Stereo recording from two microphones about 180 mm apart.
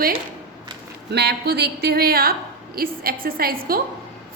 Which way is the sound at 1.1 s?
65° right (ahead or behind).